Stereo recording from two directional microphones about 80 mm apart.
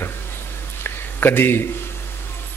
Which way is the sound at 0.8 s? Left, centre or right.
Left.